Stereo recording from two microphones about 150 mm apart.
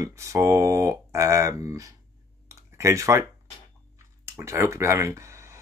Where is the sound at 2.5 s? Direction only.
20° right (ahead or behind).